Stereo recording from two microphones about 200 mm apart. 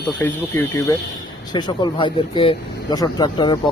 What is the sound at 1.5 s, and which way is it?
Speech, 25° left (ahead or behind).